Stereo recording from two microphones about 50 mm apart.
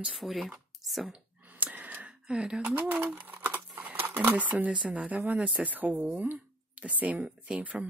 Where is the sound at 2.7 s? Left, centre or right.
Right.